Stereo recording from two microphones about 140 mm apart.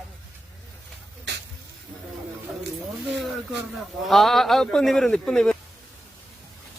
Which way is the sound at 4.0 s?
Centre (ahead or behind).